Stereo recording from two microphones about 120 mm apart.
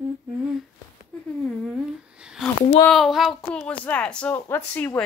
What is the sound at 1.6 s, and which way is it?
A woman's voice, 5° right (ahead or behind).